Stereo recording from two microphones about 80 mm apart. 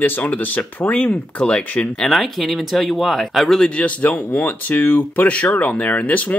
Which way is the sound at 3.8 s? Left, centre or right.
Centre.